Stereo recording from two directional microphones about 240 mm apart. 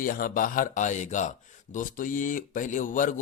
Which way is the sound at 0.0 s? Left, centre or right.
Left.